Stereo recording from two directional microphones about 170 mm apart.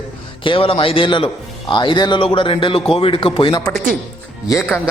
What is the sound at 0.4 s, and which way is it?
A man's voice, 30° left (ahead or behind).